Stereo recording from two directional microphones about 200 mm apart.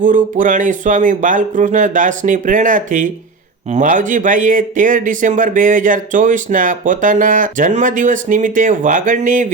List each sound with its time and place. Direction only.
0.0 s speech: 40° right (ahead or behind)